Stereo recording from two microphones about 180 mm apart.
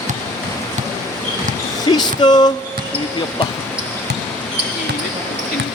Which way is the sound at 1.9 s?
25° left (ahead or behind).